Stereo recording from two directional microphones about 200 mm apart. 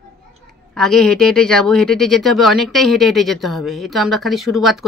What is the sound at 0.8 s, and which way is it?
Speech, centre (ahead or behind).